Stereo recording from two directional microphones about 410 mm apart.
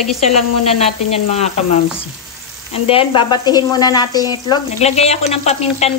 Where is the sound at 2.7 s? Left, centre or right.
Centre.